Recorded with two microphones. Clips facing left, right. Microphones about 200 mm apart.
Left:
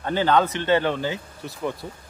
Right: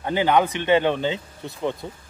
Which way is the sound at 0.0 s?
15° right (ahead or behind).